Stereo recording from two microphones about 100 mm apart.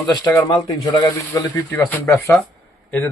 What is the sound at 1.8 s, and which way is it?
Speech, 15° left (ahead or behind).